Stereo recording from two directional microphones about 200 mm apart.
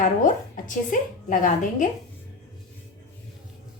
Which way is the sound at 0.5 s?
40° left (ahead or behind).